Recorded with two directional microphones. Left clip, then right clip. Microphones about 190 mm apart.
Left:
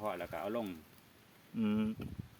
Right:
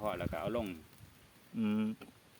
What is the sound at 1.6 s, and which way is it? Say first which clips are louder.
Speech: even; centre (ahead or behind).